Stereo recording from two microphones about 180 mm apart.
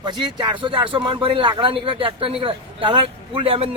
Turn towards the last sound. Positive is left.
turn(degrees=-30)  # may be behind; listen again after turning